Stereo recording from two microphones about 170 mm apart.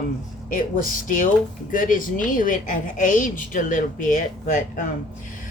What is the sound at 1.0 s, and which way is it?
A woman's voice, 50° left (ahead or behind).